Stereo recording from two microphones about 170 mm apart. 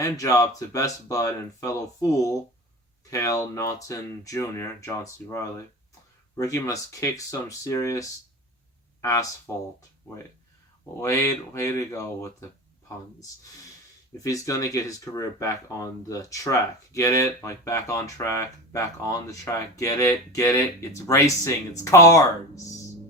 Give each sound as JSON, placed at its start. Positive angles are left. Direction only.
{"t": 0.0, "sound": "speech", "side_deg": 20}
{"t": 9.0, "sound": "a sound", "side_deg": 20}
{"t": 9.5, "sound": "speech", "side_deg": 15}
{"t": 11.0, "sound": "speech", "side_deg": 20}
{"t": 14.2, "sound": "speech", "side_deg": 20}